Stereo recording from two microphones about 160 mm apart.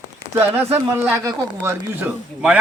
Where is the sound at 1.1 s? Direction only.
15° right (ahead or behind).